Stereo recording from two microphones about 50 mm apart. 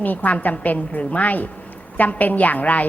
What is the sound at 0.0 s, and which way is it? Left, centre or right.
A woman's voice, left.